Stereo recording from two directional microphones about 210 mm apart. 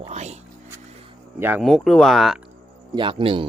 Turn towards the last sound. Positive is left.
turn(degrees=-25)  # may be behind; listen again after turning